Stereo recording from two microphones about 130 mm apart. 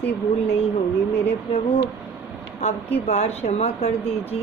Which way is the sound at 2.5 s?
60° left (ahead or behind).